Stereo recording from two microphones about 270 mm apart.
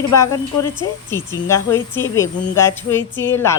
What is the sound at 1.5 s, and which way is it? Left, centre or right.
Speech, centre.